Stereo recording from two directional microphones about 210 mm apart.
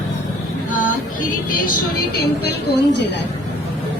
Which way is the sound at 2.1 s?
50° left (ahead or behind).